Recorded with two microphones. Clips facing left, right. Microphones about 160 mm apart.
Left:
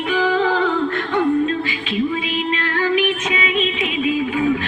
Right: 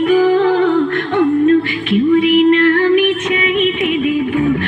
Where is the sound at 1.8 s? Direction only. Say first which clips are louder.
Right 10 dB; 60° right (ahead or behind).